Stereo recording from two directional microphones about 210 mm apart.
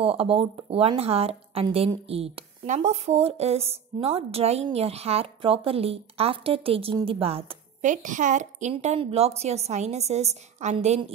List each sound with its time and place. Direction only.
0.0 s speech: 25° right (ahead or behind)